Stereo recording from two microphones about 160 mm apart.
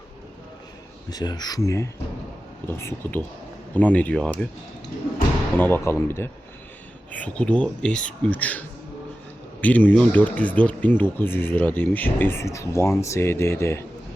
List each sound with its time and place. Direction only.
1.1 s speech: 25° left (ahead or behind); by 4.4 s 5° left (ahead or behind)
5.5 s speech: 15° left (ahead or behind)